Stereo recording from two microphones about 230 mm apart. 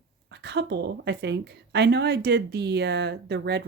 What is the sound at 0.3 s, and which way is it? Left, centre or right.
Speech, right.